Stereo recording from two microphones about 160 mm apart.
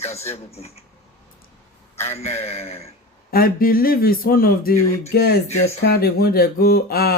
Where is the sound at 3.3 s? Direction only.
70° left (ahead or behind).